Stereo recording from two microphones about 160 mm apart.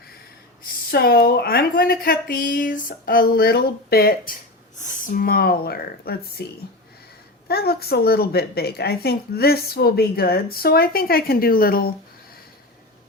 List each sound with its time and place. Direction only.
0.9 s a woman's voice: 75° left (ahead or behind)
4.8 s a woman's voice: 55° left (ahead or behind); by 6.4 s 75° left (ahead or behind)
7.4 s a woman's voice: 75° left (ahead or behind)